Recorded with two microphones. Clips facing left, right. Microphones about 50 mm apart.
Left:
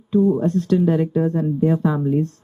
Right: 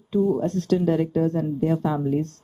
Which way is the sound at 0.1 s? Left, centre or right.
Left.